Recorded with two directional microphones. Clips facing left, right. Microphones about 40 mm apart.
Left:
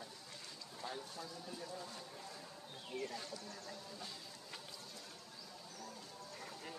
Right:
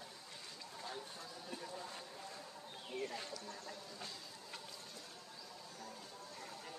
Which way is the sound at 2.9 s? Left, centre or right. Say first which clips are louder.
Right 1 dB; right.